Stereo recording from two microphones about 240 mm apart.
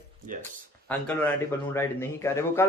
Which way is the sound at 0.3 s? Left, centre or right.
Right.